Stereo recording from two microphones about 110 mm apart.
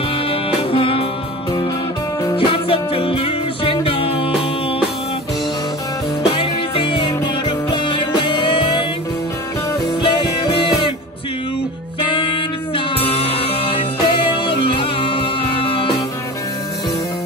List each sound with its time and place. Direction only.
0.3 s music: 55° left (ahead or behind)
2.3 s music: 55° left (ahead or behind)
6.3 s music: 55° left (ahead or behind)
10.0 s music: 45° left (ahead or behind)
12.7 s music: 60° left (ahead or behind)